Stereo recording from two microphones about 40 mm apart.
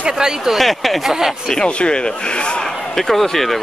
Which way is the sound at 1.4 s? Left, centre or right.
Centre.